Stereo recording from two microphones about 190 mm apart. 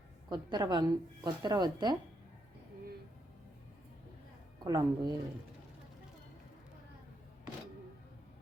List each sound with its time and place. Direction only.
0.3 s a woman's voice: 20° right (ahead or behind)
4.6 s a woman's voice: 20° right (ahead or behind)